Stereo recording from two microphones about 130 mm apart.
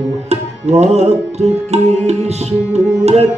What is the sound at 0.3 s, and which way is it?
Music, 55° right (ahead or behind).